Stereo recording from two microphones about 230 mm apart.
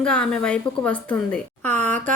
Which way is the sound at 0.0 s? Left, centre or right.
Centre.